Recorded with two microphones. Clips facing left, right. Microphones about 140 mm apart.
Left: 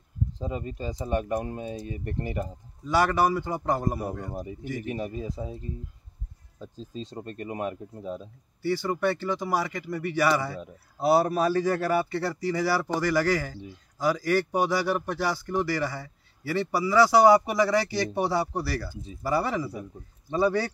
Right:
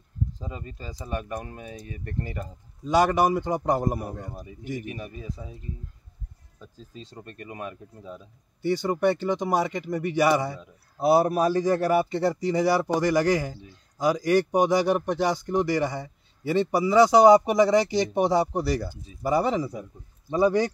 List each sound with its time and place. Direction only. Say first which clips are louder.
0.4 s speech: left 6 dB; 25° left (ahead or behind)
2.8 s a man's voice: right 2 dB; 20° right (ahead or behind)
4.3 s speech: left 1 dB; 25° left (ahead or behind)
6.6 s speech: left 6 dB; 25° left (ahead or behind)
8.6 s a man's voice: right 3 dB; 20° right (ahead or behind)